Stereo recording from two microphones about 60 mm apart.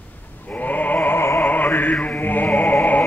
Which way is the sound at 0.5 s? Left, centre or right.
Left.